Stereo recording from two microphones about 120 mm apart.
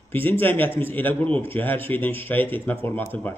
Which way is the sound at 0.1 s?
15° left (ahead or behind).